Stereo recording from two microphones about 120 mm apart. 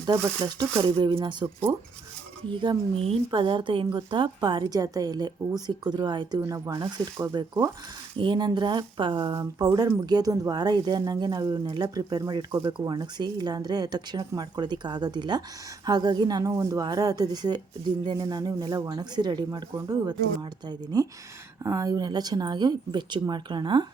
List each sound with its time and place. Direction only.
0.0 s speech: 25° right (ahead or behind)
0.9 s speech: 45° right (ahead or behind)
2.5 s speech: 45° right (ahead or behind)
9.2 s speech: 30° right (ahead or behind)
11.4 s speech: 20° right (ahead or behind)
11.7 s speech: 35° right (ahead or behind)